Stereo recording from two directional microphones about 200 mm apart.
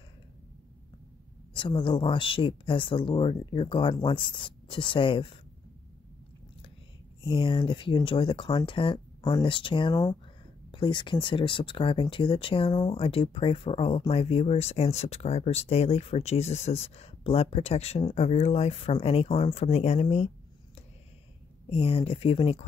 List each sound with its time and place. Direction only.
1.5 s speech: 25° left (ahead or behind)
7.2 s speech: 25° left (ahead or behind)
21.6 s speech: 30° left (ahead or behind)